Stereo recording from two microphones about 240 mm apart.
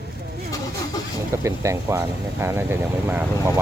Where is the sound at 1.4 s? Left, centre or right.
Centre.